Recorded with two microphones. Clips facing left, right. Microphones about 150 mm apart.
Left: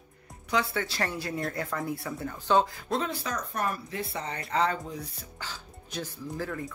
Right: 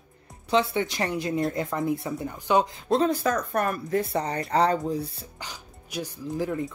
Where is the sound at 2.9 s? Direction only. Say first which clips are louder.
Right 8 dB; 40° right (ahead or behind).